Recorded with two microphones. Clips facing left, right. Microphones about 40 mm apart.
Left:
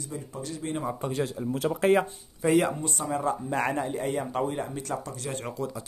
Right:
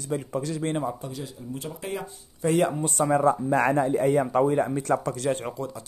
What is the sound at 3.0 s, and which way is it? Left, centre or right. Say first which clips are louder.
Speech: right 10 dB; right.